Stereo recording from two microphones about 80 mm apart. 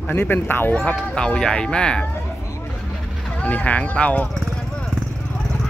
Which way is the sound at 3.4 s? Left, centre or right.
Centre.